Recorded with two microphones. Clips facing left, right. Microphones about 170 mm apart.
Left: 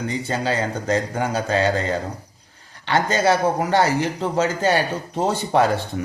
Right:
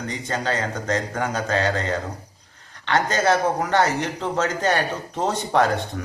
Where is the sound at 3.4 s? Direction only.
30° left (ahead or behind).